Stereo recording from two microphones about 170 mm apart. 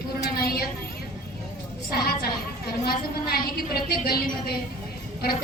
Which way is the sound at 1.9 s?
65° left (ahead or behind).